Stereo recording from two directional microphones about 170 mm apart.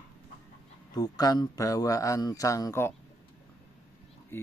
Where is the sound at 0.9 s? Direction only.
25° left (ahead or behind).